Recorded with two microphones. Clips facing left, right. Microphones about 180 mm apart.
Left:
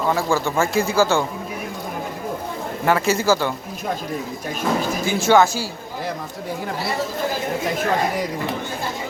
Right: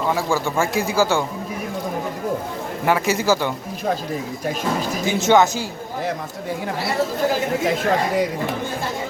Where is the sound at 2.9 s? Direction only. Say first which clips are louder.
Left 1 dB; 15° right (ahead or behind).